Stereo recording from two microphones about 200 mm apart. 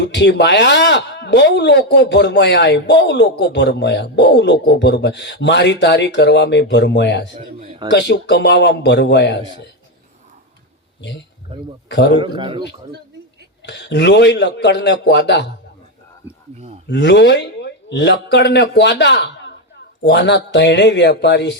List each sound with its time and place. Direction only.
0.0 s speech: 60° left (ahead or behind)
7.3 s speech: 30° right (ahead or behind)
7.9 s speech: 60° left (ahead or behind)
11.5 s a man's voice: 25° right (ahead or behind)
11.9 s a man's voice: 60° left (ahead or behind)
12.1 s a man's voice: 25° right (ahead or behind)
13.7 s speech: 60° left (ahead or behind)
16.9 s a man's voice: 60° left (ahead or behind)